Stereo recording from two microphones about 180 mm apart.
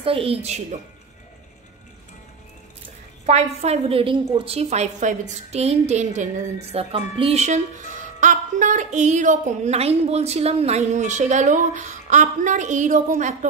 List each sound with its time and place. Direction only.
0.0 s speech: 30° right (ahead or behind)
3.3 s speech: 35° right (ahead or behind)